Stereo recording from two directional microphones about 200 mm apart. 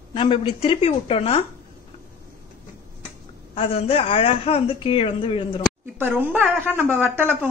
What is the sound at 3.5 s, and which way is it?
A woman's voice, 30° left (ahead or behind).